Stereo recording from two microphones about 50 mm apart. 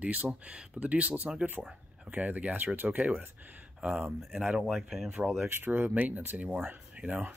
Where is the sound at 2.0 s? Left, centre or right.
Right.